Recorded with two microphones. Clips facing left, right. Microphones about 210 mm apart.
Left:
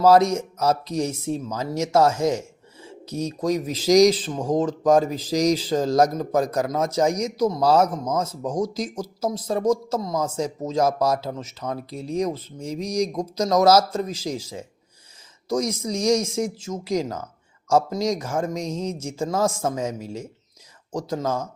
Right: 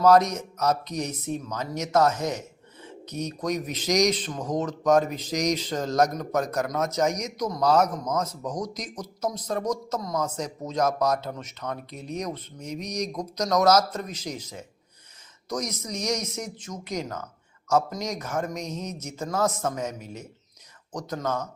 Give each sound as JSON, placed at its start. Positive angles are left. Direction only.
{"t": 0.0, "sound": "speech", "side_deg": 30}